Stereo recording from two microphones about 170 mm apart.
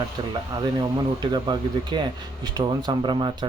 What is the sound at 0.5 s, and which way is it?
Speech, 25° right (ahead or behind).